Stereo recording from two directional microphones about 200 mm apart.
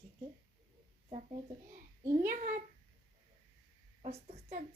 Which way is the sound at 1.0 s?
30° right (ahead or behind).